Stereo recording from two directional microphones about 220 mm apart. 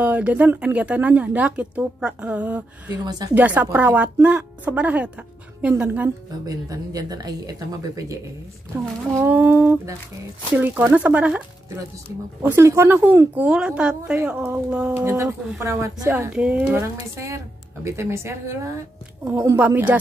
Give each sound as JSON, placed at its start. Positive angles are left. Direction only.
{"t": 0.0, "sound": "a woman's voice", "side_deg": -5}
{"t": 2.9, "sound": "a woman's voice", "side_deg": -20}
{"t": 3.3, "sound": "a woman's voice", "side_deg": -5}